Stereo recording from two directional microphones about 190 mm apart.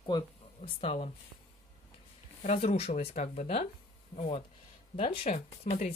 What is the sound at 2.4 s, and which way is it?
Speech, 35° left (ahead or behind).